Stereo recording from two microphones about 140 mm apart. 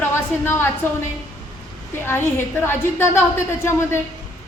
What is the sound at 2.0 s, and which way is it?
A man's voice, 20° left (ahead or behind).